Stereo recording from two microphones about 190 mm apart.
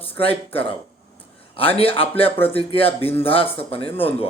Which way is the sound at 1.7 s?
30° left (ahead or behind).